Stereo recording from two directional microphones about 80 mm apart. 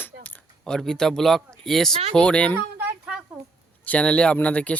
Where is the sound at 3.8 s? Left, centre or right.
Centre.